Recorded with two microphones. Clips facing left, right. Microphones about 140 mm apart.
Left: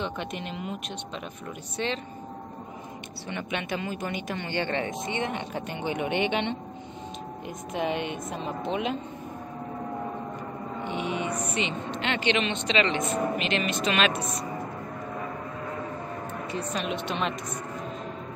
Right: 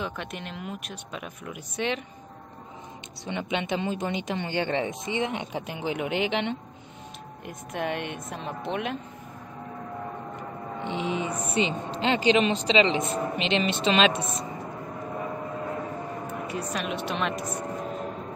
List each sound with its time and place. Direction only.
0.0 s speech: centre (ahead or behind)
3.3 s a woman's voice: 20° right (ahead or behind); by 8.9 s centre (ahead or behind)
10.8 s music: 25° right (ahead or behind)
11.5 s a woman's voice: 30° right (ahead or behind)
16.4 s speech: 5° right (ahead or behind)